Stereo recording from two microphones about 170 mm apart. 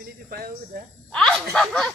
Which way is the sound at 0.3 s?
60° right (ahead or behind).